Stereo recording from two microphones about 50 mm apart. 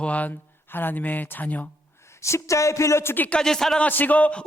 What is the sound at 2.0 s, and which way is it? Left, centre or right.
Speech, left.